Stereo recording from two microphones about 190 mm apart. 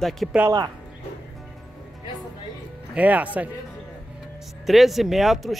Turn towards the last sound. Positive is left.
turn(degrees=0)  # may be behind; listen again after turning